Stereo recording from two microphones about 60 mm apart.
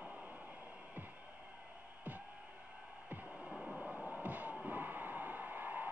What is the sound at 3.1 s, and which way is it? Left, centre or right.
Music, right.